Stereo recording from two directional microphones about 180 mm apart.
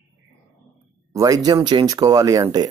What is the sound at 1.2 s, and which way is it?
Speech, 20° right (ahead or behind).